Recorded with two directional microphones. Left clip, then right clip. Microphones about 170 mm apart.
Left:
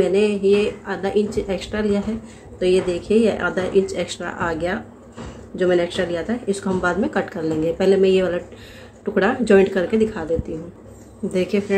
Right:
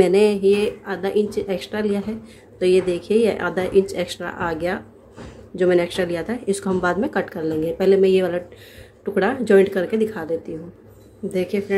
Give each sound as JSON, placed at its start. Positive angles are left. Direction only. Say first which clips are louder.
{"t": 0.0, "sound": "speech", "louder": "right 2 dB", "side_deg": -30}
{"t": 11.3, "sound": "speech", "louder": "left 2 dB", "side_deg": -5}